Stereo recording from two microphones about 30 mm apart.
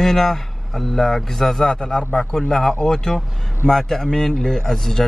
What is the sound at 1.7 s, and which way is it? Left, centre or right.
Speech, left.